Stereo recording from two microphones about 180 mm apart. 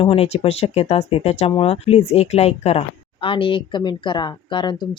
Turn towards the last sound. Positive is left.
turn(degrees=25)  # may be behind; listen again after turning